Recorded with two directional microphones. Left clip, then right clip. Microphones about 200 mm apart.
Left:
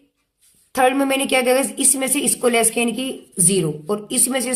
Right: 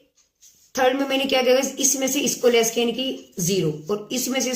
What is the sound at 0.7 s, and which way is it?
A woman's voice, 45° left (ahead or behind).